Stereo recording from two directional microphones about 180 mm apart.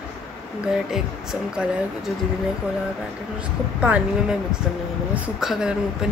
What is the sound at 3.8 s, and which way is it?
Speech, 5° right (ahead or behind).